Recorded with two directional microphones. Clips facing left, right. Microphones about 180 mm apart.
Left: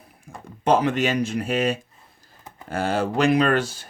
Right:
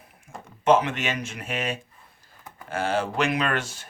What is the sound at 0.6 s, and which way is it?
Speech, 35° left (ahead or behind).